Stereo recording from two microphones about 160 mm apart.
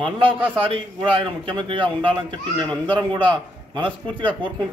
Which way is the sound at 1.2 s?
30° right (ahead or behind).